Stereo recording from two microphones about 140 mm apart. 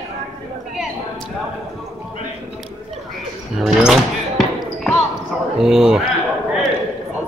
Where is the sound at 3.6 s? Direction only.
Centre (ahead or behind).